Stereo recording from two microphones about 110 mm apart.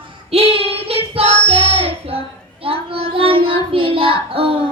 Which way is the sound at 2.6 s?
60° right (ahead or behind).